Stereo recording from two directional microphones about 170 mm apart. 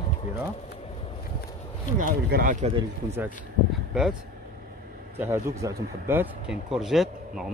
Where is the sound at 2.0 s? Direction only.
55° right (ahead or behind).